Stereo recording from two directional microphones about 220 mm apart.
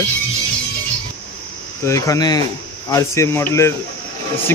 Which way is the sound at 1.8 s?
15° left (ahead or behind).